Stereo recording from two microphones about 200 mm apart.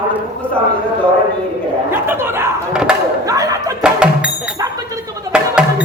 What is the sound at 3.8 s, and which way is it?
Music, 5° right (ahead or behind).